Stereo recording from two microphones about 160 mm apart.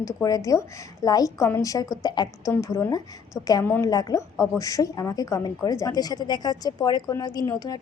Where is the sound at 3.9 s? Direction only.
25° left (ahead or behind).